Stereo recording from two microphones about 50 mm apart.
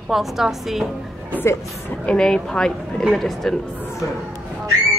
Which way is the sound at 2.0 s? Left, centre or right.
Centre.